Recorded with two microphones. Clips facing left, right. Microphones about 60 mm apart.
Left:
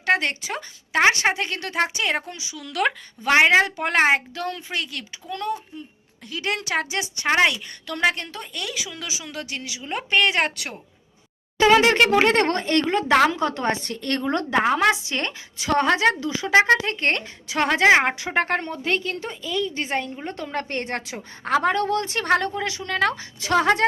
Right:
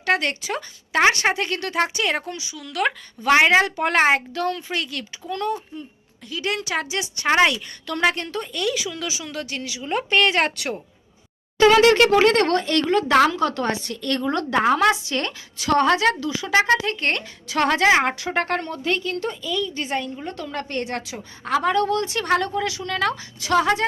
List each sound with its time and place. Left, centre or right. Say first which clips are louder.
0.0 s a woman's voice: even; left
2.5 s a woman's voice: even; centre
6.2 s a woman's voice: right 1 dB; left
7.3 s a woman's voice: right 2 dB; centre
11.6 s a woman's voice: right 2 dB; left
13.8 s a woman's voice: right 1 dB; left
14.5 s a woman's voice: right 2 dB; centre; by 17.2 s left
17.5 s a woman's voice: even; centre